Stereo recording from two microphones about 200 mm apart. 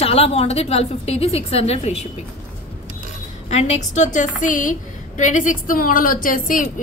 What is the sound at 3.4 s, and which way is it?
A woman's voice, 35° left (ahead or behind).